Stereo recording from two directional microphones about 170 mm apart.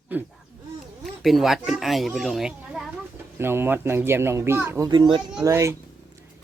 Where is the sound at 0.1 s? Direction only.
10° right (ahead or behind).